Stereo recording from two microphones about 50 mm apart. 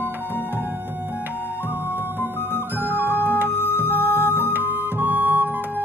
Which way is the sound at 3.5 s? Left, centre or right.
Left.